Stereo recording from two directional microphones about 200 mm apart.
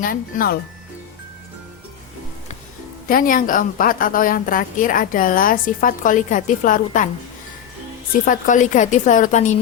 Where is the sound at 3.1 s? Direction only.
45° left (ahead or behind).